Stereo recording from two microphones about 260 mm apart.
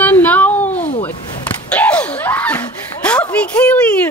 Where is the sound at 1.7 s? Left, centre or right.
Centre.